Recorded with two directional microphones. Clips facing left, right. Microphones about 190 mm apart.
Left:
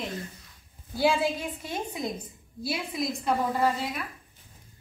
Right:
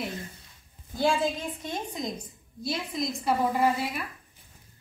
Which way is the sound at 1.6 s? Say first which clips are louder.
Even; 10° left (ahead or behind).